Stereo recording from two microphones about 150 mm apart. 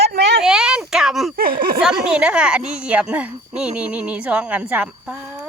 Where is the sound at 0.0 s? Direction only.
90° right.